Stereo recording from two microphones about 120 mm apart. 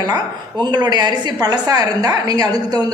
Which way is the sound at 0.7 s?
35° right (ahead or behind).